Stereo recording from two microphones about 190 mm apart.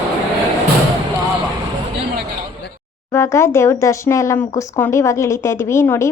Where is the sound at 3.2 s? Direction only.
15° left (ahead or behind).